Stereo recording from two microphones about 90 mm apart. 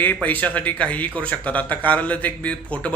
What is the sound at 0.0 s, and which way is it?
A man's voice, 20° left (ahead or behind).